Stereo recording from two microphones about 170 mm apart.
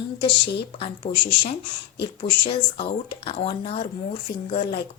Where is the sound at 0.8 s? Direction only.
30° left (ahead or behind).